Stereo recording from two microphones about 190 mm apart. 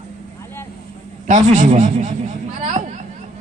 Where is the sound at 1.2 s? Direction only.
40° right (ahead or behind).